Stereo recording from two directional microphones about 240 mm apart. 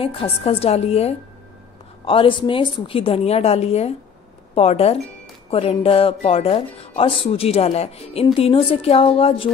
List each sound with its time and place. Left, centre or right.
0.0 s speech: left